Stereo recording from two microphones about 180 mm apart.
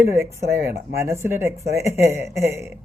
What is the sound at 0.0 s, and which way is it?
Speech, 15° right (ahead or behind).